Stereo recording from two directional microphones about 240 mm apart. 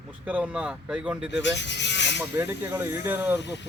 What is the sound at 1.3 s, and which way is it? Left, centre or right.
Speech, left.